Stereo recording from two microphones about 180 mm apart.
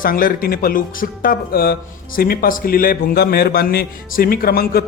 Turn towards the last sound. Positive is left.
turn(degrees=60)  # may be behind; listen again after turning